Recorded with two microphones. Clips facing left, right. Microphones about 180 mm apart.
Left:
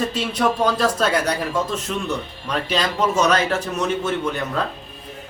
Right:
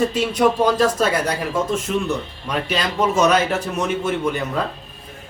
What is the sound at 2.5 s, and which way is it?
A man's voice, 10° right (ahead or behind).